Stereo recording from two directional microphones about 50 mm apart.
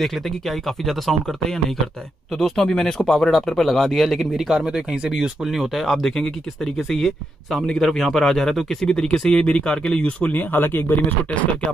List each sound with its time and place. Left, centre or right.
0.0 s speech: centre
5.4 s speech: centre
10.2 s speech: left